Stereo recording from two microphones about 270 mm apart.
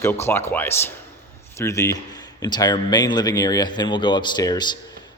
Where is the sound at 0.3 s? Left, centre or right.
Centre.